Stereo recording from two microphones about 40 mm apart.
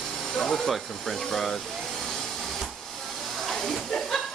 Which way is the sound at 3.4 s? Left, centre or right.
Centre.